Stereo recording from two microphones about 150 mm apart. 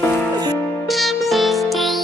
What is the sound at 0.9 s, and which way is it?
Music, centre (ahead or behind).